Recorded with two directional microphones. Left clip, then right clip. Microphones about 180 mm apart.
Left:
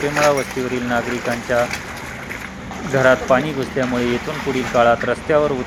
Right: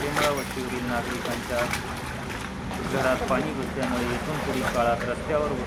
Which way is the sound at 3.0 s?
35° left (ahead or behind).